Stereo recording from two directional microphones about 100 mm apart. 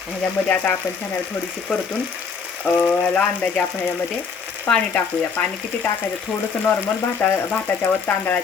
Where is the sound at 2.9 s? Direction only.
10° left (ahead or behind).